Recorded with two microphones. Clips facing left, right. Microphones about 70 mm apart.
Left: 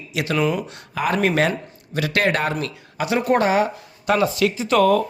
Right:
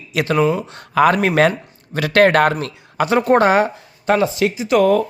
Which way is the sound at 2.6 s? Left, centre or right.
Right.